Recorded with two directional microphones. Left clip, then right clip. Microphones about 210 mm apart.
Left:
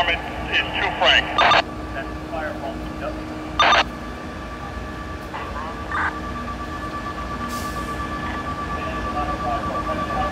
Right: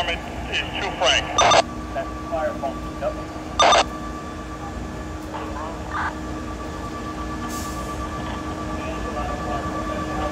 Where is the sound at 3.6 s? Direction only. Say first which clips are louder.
Even; 20° right (ahead or behind).